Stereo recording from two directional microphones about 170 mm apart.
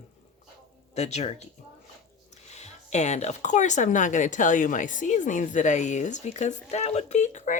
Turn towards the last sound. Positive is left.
turn(degrees=45)  # may be behind; listen again after turning